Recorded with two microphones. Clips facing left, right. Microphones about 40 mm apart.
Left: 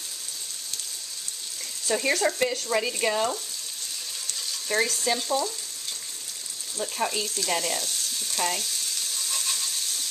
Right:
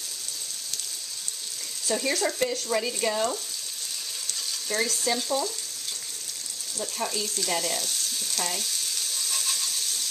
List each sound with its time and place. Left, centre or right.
1.9 s speech: centre
4.6 s speech: centre
6.8 s speech: centre
7.2 s frying: centre